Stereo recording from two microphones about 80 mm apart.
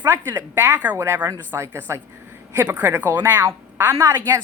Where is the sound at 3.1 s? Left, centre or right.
Right.